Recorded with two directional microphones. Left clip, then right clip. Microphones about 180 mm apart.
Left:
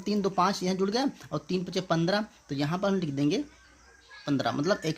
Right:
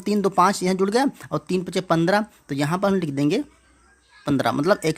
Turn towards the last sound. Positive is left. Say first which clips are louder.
# right 8 dB
turn(degrees=-45)  # may be behind; listen again after turning